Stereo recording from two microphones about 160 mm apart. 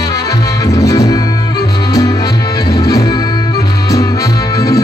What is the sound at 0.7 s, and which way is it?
Music, 20° left (ahead or behind).